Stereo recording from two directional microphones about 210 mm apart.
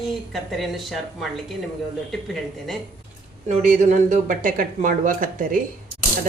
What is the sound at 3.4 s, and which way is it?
Speech, 35° right (ahead or behind).